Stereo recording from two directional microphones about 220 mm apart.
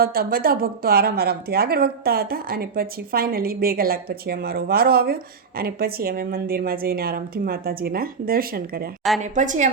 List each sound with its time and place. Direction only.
0.0 s a woman's voice: 40° right (ahead or behind)